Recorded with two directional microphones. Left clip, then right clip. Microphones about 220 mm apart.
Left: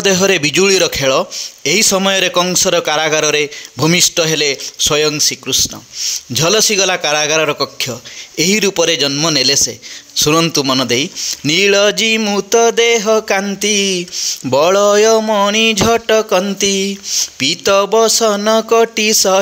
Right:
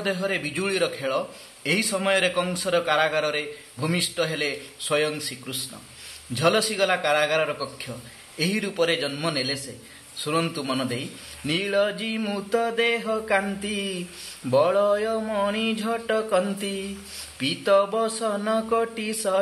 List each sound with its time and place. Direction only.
0.0 s speech: 45° left (ahead or behind)